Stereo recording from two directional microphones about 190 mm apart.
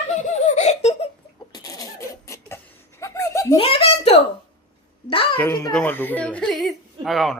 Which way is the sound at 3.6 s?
30° left (ahead or behind).